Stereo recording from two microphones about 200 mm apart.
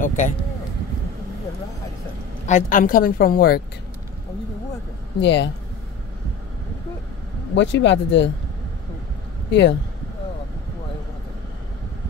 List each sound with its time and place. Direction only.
0.0 s vehicle: 40° left (ahead or behind)
2.4 s a woman's voice: 40° left (ahead or behind)
5.2 s speech: 60° left (ahead or behind)
7.5 s speech: 65° left (ahead or behind)
9.5 s speech: 60° left (ahead or behind)